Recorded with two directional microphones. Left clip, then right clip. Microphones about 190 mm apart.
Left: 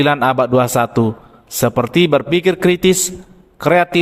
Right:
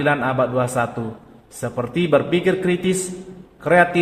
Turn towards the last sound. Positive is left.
turn(degrees=55)  # may be behind; listen again after turning